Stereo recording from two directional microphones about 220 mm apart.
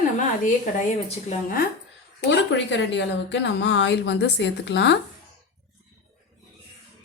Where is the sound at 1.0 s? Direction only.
35° left (ahead or behind).